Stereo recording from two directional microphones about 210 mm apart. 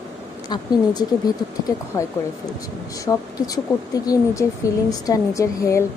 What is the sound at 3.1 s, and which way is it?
A woman's voice, 15° left (ahead or behind).